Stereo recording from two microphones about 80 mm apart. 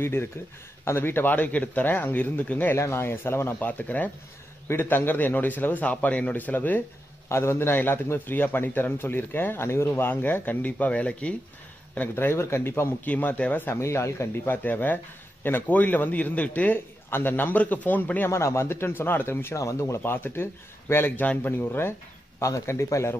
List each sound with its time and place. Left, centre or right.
0.0 s a man's voice: left
2.8 s a man's voice: left
7.2 s a man's voice: left
13.1 s a man's voice: centre; by 14.5 s left
14.5 s a man's voice: left
18.3 s speech: left
20.0 s a man's voice: left